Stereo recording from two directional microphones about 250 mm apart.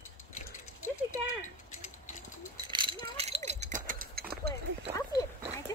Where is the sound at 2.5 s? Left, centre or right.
Centre; by 4.5 s right.